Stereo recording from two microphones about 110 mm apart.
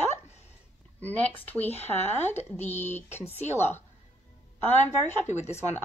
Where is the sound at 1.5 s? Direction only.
15° left (ahead or behind).